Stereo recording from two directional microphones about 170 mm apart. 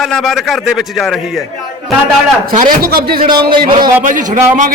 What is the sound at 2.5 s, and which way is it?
Speech, 55° right (ahead or behind).